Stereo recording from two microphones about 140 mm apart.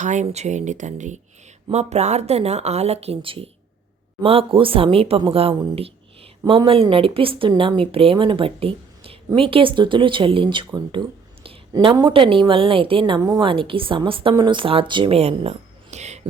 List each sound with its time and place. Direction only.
0.0 s a woman's voice: 60° right (ahead or behind)